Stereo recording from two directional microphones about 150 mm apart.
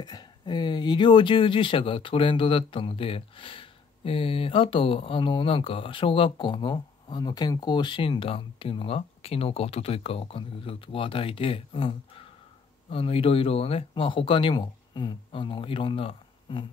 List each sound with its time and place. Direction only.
0.0 s speech: 30° left (ahead or behind)